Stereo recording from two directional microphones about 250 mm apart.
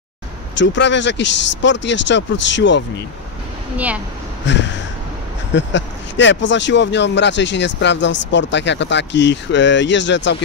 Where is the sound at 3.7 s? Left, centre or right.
Centre.